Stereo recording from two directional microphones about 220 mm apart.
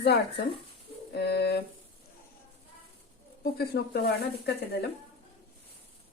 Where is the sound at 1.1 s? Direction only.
50° left (ahead or behind).